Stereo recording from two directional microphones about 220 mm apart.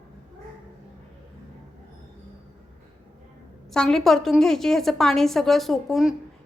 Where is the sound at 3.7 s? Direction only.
Centre (ahead or behind).